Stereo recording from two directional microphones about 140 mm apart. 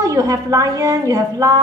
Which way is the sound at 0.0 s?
25° right (ahead or behind).